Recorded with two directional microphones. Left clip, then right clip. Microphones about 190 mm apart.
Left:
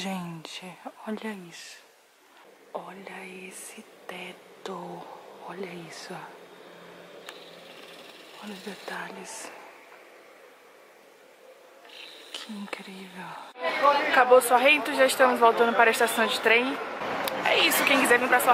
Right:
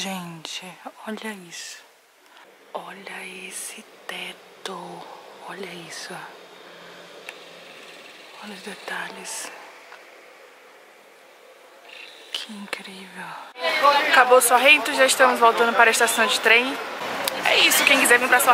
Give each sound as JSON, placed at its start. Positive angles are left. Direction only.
{"t": 0.0, "sound": "speech", "side_deg": 5}
{"t": 2.9, "sound": "speech", "side_deg": 10}
{"t": 4.7, "sound": "speech", "side_deg": 30}
{"t": 5.5, "sound": "speech", "side_deg": 5}
{"t": 8.4, "sound": "speech", "side_deg": 10}
{"t": 12.3, "sound": "speech", "side_deg": 5}